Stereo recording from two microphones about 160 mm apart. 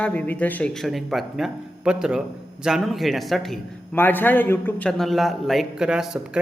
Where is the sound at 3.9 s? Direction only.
10° left (ahead or behind).